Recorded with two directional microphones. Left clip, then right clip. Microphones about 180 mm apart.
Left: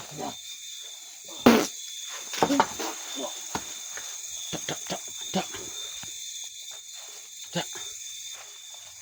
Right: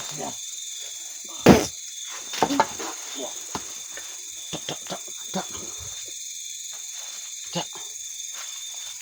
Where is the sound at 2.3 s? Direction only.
25° right (ahead or behind).